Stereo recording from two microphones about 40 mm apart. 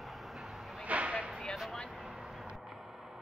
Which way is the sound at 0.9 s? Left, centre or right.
Right.